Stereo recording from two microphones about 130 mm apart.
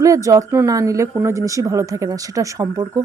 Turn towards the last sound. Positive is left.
turn(degrees=-25)  # may be behind; listen again after turning